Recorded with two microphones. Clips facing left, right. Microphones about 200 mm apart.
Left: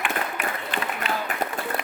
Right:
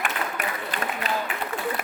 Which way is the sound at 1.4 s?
40° left (ahead or behind).